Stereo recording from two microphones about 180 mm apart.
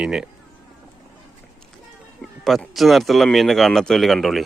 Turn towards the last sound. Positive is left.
turn(degrees=0)  # may be behind; listen again after turning